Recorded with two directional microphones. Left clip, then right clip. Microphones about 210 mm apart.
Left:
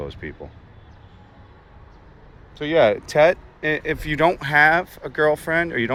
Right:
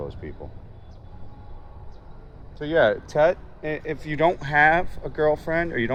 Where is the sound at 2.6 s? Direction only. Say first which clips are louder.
Left 3 dB; 30° left (ahead or behind).